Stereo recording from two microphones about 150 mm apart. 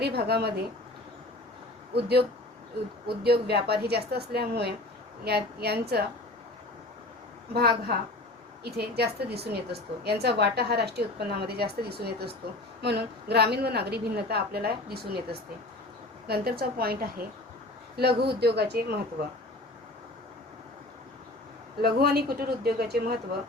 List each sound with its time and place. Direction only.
0.0 s a woman's voice: 90° right
1.9 s a woman's voice: 90° right
7.5 s a woman's voice: 90° right
21.8 s a woman's voice: 90° right